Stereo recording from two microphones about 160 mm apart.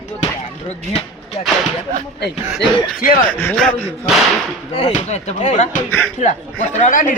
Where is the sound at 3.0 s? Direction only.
65° left (ahead or behind).